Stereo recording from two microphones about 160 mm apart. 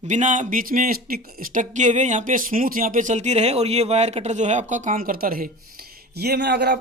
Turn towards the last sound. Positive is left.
turn(degrees=-90)